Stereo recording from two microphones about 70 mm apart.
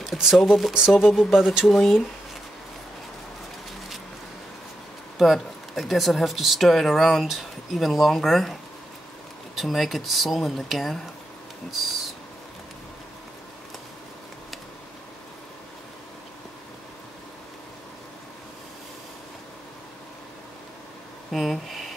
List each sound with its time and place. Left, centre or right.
0.0 s speech: centre
5.2 s speech: centre
9.6 s speech: centre
21.3 s speech: centre